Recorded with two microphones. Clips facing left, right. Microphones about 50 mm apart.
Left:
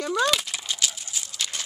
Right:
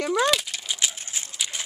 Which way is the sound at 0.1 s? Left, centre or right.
Centre.